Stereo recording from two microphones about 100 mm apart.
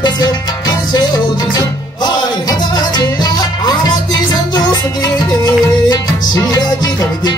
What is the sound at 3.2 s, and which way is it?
Music, 40° left (ahead or behind).